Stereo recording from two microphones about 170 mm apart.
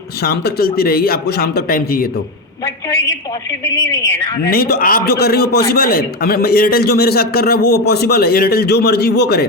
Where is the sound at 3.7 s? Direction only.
20° left (ahead or behind).